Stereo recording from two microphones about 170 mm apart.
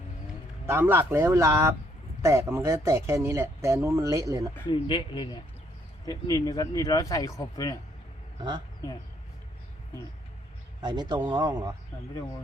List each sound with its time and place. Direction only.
0.7 s speech: 15° right (ahead or behind)
4.7 s speech: 30° left (ahead or behind)
10.8 s speech: 25° right (ahead or behind)